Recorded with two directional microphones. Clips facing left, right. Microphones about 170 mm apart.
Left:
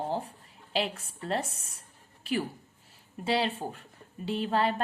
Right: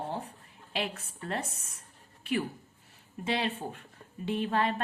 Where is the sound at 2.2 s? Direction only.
35° left (ahead or behind).